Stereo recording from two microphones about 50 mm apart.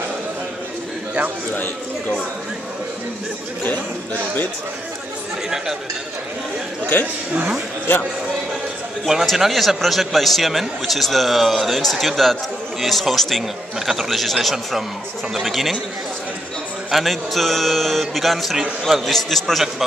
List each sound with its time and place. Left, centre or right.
1.5 s speech: left
9.0 s a man's voice: centre
16.9 s a man's voice: centre